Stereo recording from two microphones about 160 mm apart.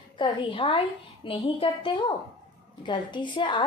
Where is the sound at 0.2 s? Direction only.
35° left (ahead or behind).